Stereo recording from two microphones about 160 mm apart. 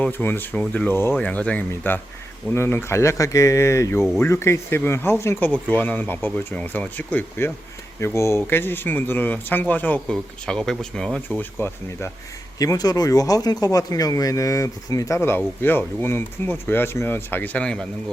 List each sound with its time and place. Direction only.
0.0 s speech: 10° left (ahead or behind)